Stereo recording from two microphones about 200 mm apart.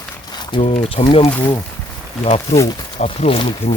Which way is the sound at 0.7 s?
30° left (ahead or behind).